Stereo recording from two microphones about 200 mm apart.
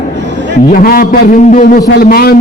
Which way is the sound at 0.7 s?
45° left (ahead or behind).